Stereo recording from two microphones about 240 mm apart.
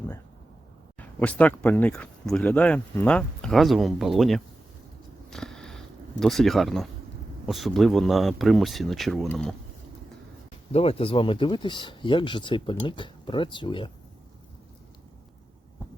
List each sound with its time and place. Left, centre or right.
0.9 s speech: centre
5.3 s a sound: centre
7.4 s speech: centre
10.7 s speech: left